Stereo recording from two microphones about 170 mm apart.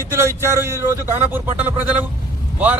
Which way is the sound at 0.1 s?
15° right (ahead or behind).